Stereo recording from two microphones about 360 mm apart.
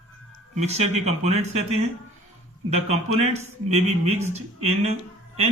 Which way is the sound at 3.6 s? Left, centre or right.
Centre.